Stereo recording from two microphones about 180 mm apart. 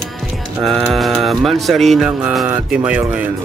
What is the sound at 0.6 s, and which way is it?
Speech, centre (ahead or behind).